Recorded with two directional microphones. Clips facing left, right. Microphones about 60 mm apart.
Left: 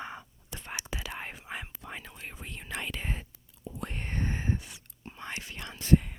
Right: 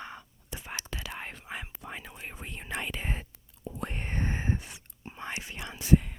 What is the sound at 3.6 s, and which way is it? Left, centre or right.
Whispering, right.